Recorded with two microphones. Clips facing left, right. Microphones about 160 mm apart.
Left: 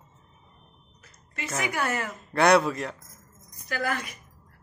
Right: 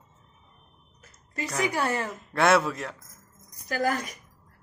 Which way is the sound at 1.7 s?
30° right (ahead or behind).